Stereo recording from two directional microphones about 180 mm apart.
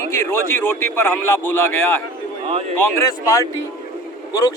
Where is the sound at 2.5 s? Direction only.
35° right (ahead or behind).